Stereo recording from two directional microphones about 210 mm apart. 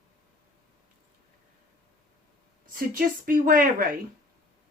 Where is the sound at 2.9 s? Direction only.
40° right (ahead or behind).